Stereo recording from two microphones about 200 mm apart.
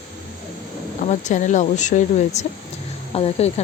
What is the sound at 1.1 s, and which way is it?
Speech, 35° left (ahead or behind).